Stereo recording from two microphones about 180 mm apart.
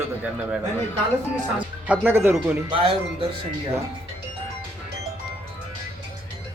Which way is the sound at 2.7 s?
30° right (ahead or behind).